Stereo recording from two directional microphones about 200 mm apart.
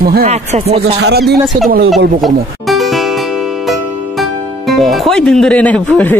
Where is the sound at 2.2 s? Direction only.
Centre (ahead or behind).